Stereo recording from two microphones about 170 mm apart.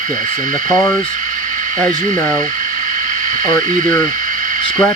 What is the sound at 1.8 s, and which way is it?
Speech, 50° right (ahead or behind).